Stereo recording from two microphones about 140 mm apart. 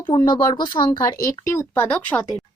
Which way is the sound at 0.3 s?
35° left (ahead or behind).